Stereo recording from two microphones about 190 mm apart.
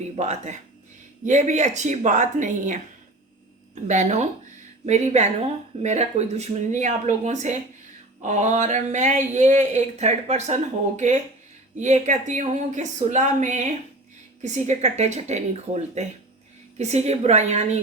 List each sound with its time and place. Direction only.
0.2 s speech: 35° right (ahead or behind)
3.8 s speech: 40° right (ahead or behind)